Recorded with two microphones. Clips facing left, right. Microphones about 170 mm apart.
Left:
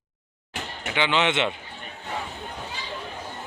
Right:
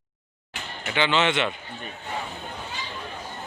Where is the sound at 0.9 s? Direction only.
15° left (ahead or behind).